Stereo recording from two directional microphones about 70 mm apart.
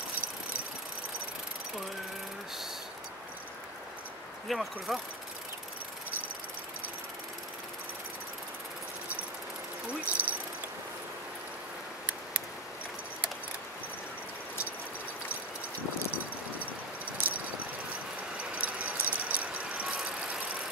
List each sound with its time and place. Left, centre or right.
4.5 s speech: centre
9.8 s a sound: right
18.5 s vehicle: right